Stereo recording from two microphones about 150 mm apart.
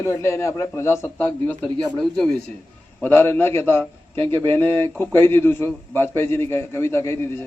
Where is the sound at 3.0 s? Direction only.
15° left (ahead or behind).